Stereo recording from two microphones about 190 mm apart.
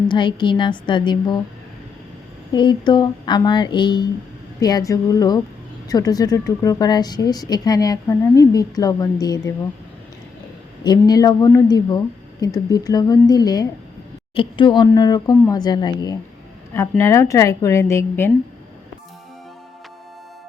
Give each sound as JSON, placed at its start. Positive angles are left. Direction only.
{"t": 0.1, "sound": "a woman's voice", "side_deg": 25}
{"t": 2.5, "sound": "a woman's voice", "side_deg": 25}
{"t": 10.8, "sound": "a woman's voice", "side_deg": 20}